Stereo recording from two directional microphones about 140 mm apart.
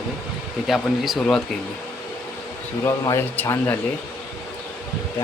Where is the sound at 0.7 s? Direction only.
Centre (ahead or behind).